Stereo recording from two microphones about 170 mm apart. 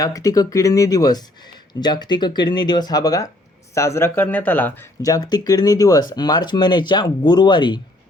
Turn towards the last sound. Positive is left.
turn(degrees=25)  # may be behind; listen again after turning